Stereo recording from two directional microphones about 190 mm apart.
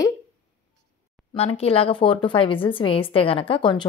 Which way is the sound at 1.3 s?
30° left (ahead or behind).